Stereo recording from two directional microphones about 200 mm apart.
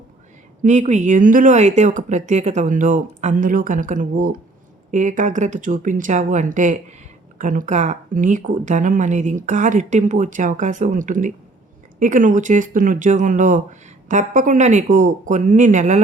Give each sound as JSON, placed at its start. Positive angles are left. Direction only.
{"t": 0.6, "sound": "speech", "side_deg": -35}